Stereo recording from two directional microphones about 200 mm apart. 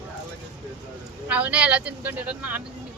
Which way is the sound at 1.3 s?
5° right (ahead or behind).